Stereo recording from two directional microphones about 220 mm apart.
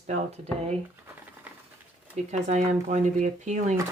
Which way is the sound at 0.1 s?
30° right (ahead or behind).